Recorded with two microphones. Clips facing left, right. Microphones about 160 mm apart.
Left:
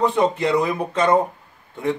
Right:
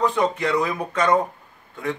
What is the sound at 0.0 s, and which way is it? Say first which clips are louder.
A man's voice: left 3 dB; 25° left (ahead or behind).